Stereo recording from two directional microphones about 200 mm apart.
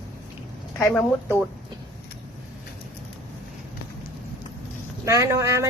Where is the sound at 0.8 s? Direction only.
10° left (ahead or behind).